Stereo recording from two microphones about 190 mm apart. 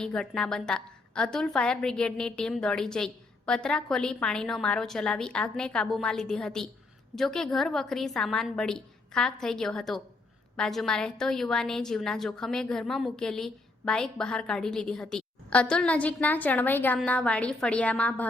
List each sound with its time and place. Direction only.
0.0 s a woman's voice: 5° left (ahead or behind)